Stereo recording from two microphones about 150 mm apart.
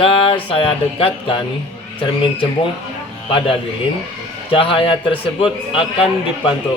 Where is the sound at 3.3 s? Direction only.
35° left (ahead or behind).